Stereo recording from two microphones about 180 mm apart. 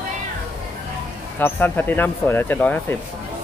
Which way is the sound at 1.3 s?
10° left (ahead or behind).